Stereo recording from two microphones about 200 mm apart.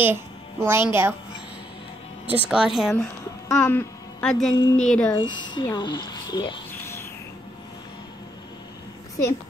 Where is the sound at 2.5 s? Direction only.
5° right (ahead or behind).